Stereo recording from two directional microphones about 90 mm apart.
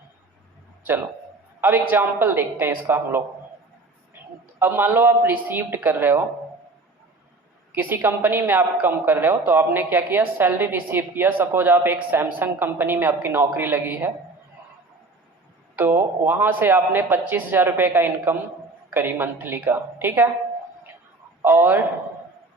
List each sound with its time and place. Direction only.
1.6 s a woman's voice: 20° right (ahead or behind)
4.6 s a woman's voice: 25° right (ahead or behind)
7.8 s a woman's voice: 20° right (ahead or behind)
15.7 s a woman's voice: 25° right (ahead or behind)
21.4 s a woman's voice: 20° right (ahead or behind)